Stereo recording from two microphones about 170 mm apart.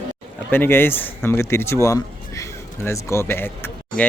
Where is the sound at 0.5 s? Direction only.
10° left (ahead or behind).